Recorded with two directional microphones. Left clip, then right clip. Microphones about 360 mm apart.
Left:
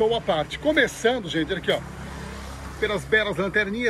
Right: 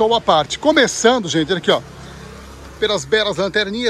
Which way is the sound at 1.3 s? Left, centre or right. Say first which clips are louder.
Right 8 dB; right.